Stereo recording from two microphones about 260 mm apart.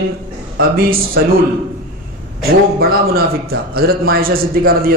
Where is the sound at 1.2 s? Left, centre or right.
Right.